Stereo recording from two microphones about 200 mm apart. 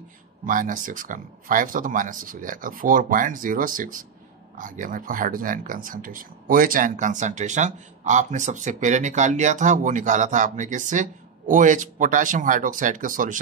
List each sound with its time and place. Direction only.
0.5 s speech: 40° right (ahead or behind)